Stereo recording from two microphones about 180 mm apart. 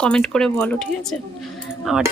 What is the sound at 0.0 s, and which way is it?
A woman's voice, 5° left (ahead or behind).